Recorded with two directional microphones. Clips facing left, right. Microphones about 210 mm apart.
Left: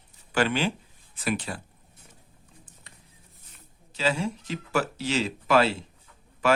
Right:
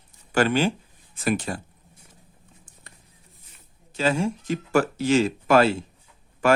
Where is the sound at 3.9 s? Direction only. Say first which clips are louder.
Right 4 dB; 50° right (ahead or behind).